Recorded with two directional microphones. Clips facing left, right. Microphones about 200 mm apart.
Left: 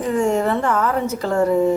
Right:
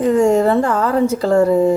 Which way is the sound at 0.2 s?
35° right (ahead or behind).